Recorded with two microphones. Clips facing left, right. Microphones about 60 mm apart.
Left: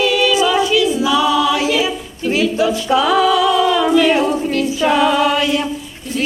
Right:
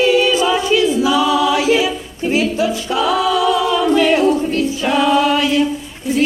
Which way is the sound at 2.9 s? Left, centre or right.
Centre.